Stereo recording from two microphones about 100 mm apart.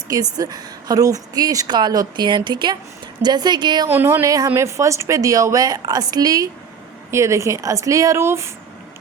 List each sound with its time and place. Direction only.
0.1 s a woman's voice: 40° right (ahead or behind)
3.8 s speech: 20° right (ahead or behind)
4.3 s a woman's voice: 35° right (ahead or behind)